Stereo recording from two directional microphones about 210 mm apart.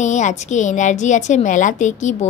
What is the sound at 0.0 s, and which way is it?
A woman's voice, 35° left (ahead or behind).